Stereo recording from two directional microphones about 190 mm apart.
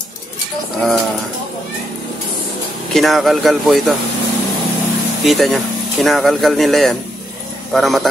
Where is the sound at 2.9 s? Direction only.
Centre (ahead or behind).